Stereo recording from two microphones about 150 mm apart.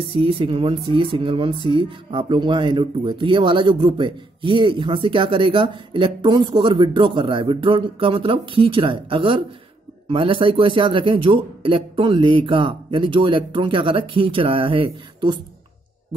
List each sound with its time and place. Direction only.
0.0 s speech: 40° right (ahead or behind)